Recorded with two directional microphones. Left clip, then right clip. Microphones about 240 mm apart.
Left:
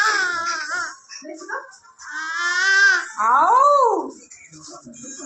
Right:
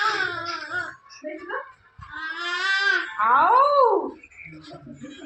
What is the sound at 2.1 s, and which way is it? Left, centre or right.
Baby cry, centre.